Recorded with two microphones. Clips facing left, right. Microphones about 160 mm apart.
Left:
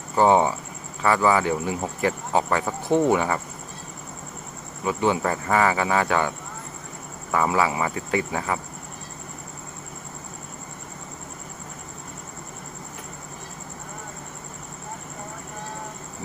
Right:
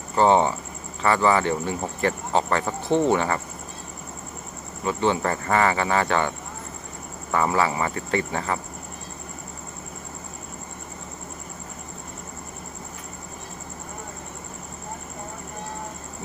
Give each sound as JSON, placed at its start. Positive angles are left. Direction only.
{"t": 0.2, "sound": "speech", "side_deg": 10}
{"t": 4.8, "sound": "speech", "side_deg": 10}